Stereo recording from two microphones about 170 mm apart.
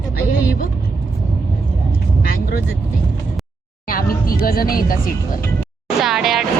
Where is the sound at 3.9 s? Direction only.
60° left (ahead or behind).